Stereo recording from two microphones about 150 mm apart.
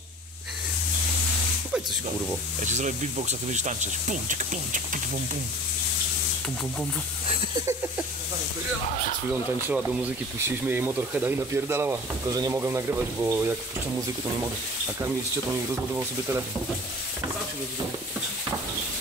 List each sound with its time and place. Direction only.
2.6 s speech: 50° right (ahead or behind)
7.5 s a sound: 20° right (ahead or behind)
9.3 s speech: 15° right (ahead or behind)
15.7 s speech: 15° right (ahead or behind)